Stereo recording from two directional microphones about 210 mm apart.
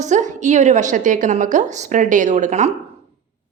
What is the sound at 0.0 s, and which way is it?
A woman's voice, 35° right (ahead or behind).